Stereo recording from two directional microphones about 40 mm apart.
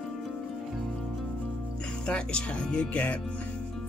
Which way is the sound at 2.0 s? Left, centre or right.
Left.